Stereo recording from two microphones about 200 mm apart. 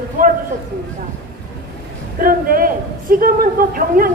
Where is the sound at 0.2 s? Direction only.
45° right (ahead or behind).